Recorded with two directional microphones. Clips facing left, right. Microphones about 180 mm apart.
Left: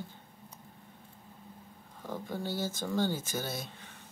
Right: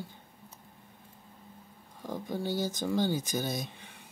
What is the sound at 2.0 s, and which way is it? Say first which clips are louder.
Speech: right 3 dB; 15° right (ahead or behind).